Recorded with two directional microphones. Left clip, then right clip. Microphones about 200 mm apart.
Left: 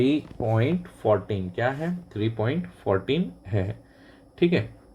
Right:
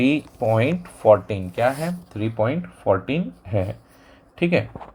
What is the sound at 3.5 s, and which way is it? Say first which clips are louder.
Speech: right 5 dB; 55° right (ahead or behind).